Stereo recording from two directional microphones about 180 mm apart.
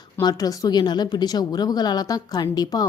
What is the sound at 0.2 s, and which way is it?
A woman's voice, 20° left (ahead or behind).